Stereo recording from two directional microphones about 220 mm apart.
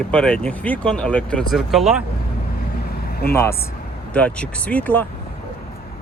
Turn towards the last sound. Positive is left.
turn(degrees=10)  # may be behind; listen again after turning